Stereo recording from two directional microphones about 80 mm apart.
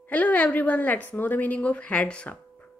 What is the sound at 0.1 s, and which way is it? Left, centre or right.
A woman's voice, centre.